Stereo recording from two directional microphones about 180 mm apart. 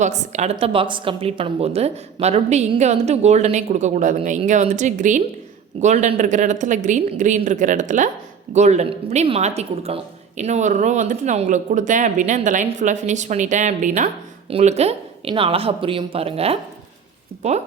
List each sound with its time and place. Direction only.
0.0 s a woman's voice: 40° right (ahead or behind)